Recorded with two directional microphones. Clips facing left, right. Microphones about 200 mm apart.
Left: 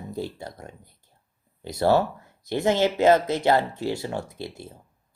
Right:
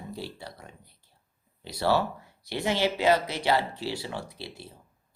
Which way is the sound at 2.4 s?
50° left (ahead or behind).